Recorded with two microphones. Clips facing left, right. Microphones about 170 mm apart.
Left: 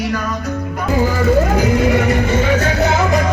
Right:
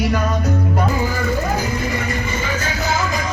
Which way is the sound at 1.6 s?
75° left (ahead or behind).